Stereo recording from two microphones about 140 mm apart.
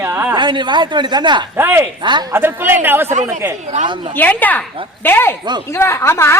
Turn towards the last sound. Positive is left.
turn(degrees=20)  # may be behind; listen again after turning